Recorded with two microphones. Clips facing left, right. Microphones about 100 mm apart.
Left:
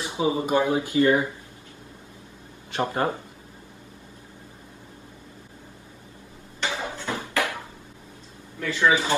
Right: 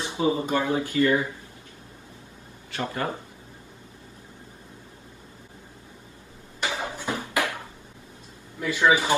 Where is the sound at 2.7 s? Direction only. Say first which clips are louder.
Left 4 dB; 25° left (ahead or behind).